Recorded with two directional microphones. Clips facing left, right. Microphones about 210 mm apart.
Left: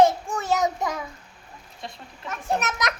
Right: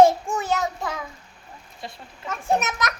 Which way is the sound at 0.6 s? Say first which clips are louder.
Left 3 dB; 15° left (ahead or behind).